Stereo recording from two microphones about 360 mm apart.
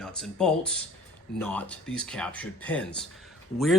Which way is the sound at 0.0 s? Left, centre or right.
Centre.